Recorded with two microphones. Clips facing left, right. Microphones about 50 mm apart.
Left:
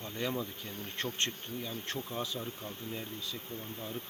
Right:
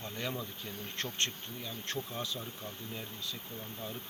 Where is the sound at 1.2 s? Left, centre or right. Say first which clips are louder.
Left 1 dB; centre.